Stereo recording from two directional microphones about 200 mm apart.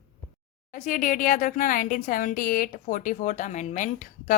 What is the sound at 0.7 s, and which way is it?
Speech, 40° left (ahead or behind).